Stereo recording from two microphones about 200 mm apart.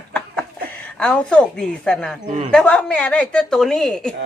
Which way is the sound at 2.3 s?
30° right (ahead or behind).